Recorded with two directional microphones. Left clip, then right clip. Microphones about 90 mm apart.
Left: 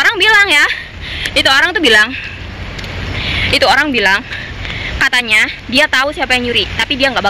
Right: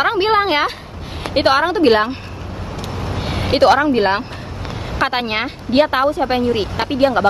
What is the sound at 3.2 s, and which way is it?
Speech, 20° right (ahead or behind).